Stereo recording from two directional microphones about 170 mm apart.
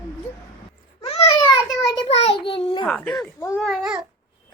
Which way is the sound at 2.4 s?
35° left (ahead or behind).